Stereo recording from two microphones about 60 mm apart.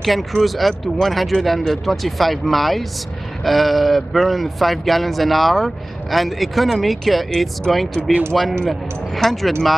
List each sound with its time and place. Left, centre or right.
0.0 s speech: centre